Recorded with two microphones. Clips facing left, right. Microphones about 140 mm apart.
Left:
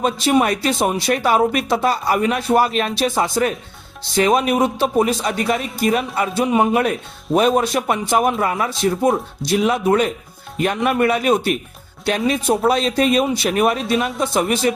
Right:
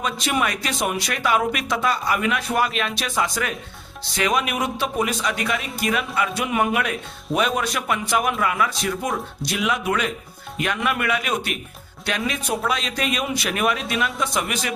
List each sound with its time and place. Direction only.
0.3 s speech: 35° left (ahead or behind)